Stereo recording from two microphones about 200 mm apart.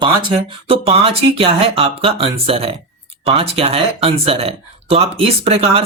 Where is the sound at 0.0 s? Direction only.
25° right (ahead or behind).